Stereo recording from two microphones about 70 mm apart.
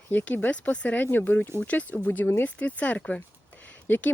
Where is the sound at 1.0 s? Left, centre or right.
Left.